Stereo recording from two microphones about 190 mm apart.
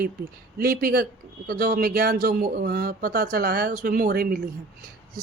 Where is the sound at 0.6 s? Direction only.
50° right (ahead or behind).